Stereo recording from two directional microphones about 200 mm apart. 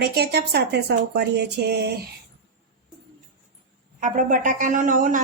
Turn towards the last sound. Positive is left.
turn(degrees=-40)  # may be behind; listen again after turning